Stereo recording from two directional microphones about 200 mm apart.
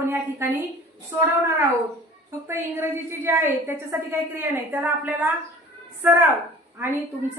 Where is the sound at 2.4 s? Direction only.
10° right (ahead or behind).